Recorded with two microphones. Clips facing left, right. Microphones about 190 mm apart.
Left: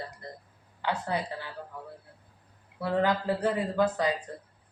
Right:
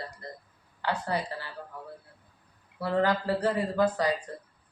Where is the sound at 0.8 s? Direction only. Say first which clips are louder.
Even; 15° left (ahead or behind).